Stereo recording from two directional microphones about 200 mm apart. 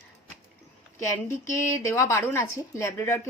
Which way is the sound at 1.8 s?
15° left (ahead or behind).